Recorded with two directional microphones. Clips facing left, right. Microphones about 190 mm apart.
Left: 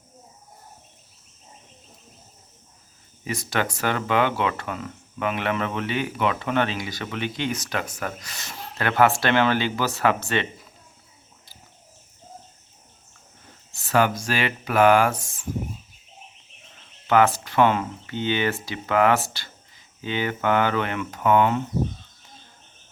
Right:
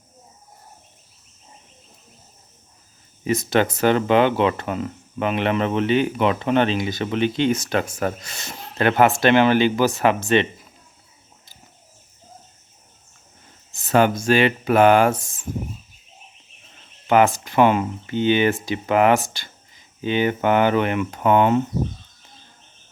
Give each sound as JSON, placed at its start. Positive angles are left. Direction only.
{"t": 3.2, "sound": "speech", "side_deg": -25}
{"t": 13.8, "sound": "speech", "side_deg": -25}
{"t": 17.1, "sound": "speech", "side_deg": -15}